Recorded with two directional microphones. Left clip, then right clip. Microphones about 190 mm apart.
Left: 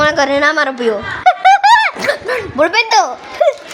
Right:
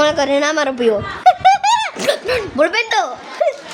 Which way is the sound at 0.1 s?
5° right (ahead or behind).